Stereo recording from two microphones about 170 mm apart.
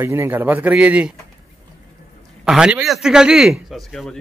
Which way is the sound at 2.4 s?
5° right (ahead or behind).